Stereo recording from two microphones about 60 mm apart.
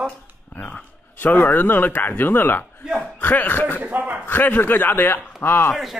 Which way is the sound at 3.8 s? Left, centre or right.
Right.